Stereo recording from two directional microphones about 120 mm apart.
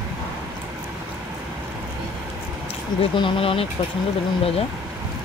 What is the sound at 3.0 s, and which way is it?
Speech, 45° left (ahead or behind).